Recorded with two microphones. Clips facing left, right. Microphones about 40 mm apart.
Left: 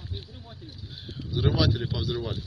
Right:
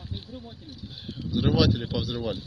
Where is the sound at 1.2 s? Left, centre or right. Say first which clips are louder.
Right 4 dB; left.